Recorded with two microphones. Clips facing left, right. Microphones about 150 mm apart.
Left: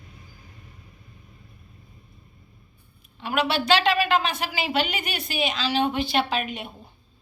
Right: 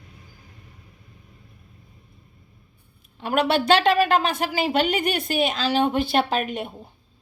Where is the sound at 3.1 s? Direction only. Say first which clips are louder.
Right 4 dB; 45° right (ahead or behind).